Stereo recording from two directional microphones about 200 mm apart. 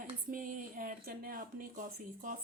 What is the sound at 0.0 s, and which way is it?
Speech, 40° right (ahead or behind).